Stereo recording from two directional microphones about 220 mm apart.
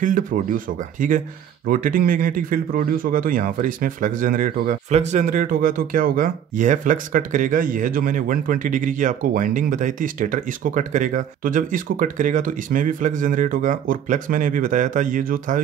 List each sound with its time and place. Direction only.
0.0 s a man's voice: 35° right (ahead or behind)